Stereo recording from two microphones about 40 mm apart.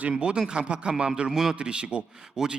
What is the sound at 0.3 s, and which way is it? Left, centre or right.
A man's voice, centre.